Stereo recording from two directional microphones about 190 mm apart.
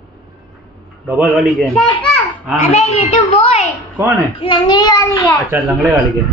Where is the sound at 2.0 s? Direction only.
Centre (ahead or behind).